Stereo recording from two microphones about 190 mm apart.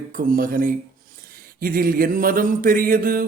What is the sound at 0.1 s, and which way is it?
Speech, 45° right (ahead or behind).